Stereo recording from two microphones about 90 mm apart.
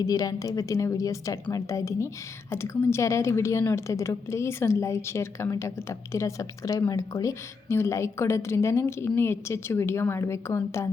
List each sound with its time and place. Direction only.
0.0 s a woman's voice: 45° left (ahead or behind)